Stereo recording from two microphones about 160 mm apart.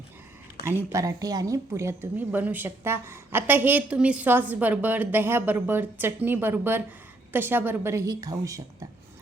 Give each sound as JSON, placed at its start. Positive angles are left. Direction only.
{"t": 0.6, "sound": "a woman's voice", "side_deg": -15}